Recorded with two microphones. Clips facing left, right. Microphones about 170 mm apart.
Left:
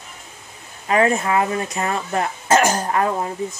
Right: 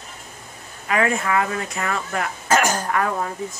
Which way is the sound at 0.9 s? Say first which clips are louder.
Left 3 dB; 25° left (ahead or behind).